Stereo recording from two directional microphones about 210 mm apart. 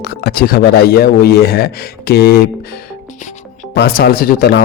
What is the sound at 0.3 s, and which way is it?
A man's voice, 45° left (ahead or behind).